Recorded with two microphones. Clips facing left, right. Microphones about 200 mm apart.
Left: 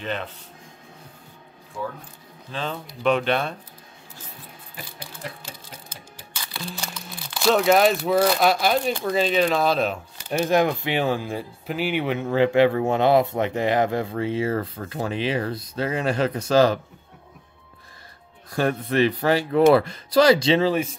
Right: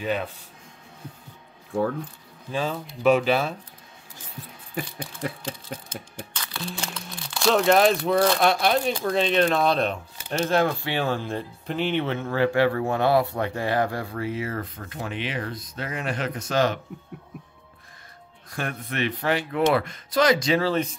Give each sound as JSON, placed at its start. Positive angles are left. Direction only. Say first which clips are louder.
{"t": 0.0, "sound": "speech", "louder": "right 3 dB", "side_deg": -10}
{"t": 2.5, "sound": "speech", "louder": "right 3 dB", "side_deg": -5}
{"t": 5.7, "sound": "a sound", "louder": "right 8 dB", "side_deg": -55}
{"t": 6.3, "sound": "speech", "louder": "even", "side_deg": 10}
{"t": 18.6, "sound": "speech", "louder": "left 8 dB", "side_deg": 35}
{"t": 20.6, "sound": "speech", "louder": "left 2 dB", "side_deg": 10}